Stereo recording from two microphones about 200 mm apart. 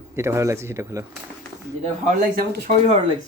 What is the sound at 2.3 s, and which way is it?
Speech, 50° right (ahead or behind).